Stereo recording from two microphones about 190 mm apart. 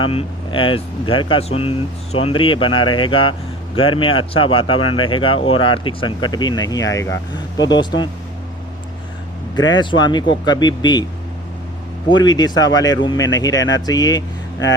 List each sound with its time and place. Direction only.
0.0 s speech: 30° left (ahead or behind)
9.6 s speech: 20° left (ahead or behind)
12.0 s speech: 20° left (ahead or behind)